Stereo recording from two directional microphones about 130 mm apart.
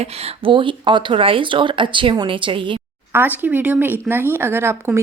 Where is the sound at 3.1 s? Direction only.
15° right (ahead or behind).